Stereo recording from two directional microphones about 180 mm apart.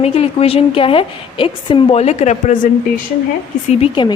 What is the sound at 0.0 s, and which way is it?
A woman's voice, 35° left (ahead or behind).